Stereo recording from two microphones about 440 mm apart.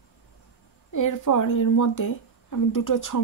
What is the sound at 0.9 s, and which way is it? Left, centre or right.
Speech, left.